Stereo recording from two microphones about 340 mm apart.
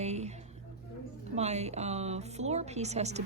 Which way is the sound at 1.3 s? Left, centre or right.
Centre.